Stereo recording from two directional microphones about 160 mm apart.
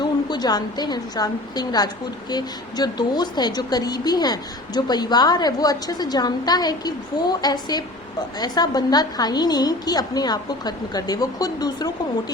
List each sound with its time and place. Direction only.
0.0 s a woman's voice: 25° left (ahead or behind)